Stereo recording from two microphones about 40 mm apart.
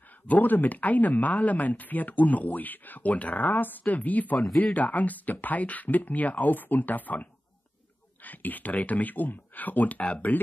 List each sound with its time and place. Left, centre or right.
0.3 s speech: left